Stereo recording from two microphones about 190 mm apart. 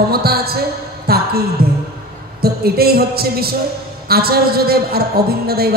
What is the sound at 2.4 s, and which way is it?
A man's voice, 55° right (ahead or behind).